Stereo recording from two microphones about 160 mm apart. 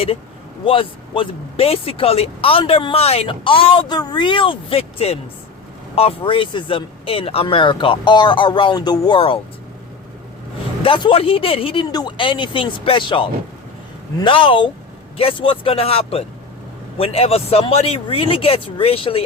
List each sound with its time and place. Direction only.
0.6 s speech: 35° left (ahead or behind)
10.8 s speech: 30° left (ahead or behind)